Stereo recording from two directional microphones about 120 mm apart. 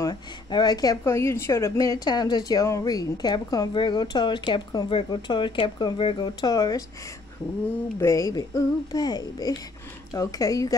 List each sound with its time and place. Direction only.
0.0 s a woman's voice: 35° left (ahead or behind)
1.0 s a woman's voice: 20° left (ahead or behind)
8.0 s a woman's voice: 25° left (ahead or behind)